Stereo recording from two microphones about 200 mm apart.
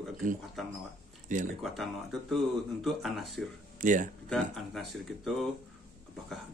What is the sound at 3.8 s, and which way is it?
Speech, 40° right (ahead or behind).